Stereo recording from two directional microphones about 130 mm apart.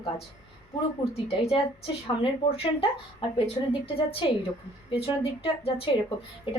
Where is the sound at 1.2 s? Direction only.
50° left (ahead or behind).